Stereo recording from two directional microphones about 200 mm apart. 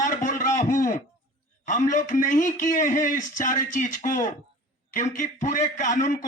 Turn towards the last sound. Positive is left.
turn(degrees=40)  # may be behind; listen again after turning